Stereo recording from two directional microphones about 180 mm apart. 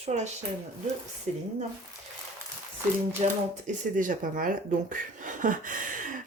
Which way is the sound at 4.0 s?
50° right (ahead or behind).